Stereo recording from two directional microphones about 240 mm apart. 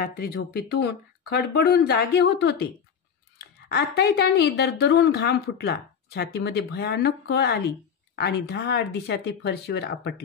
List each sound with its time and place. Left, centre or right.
0.0 s a woman's voice: left